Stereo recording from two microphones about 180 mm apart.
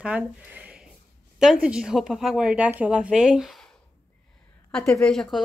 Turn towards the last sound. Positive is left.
turn(degrees=5)  # may be behind; listen again after turning